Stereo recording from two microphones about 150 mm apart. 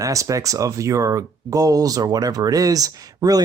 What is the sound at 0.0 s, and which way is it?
Speech, 20° right (ahead or behind).